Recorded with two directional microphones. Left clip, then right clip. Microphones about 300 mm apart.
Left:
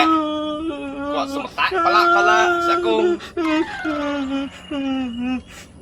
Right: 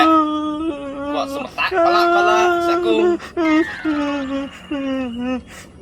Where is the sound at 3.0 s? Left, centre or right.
Centre.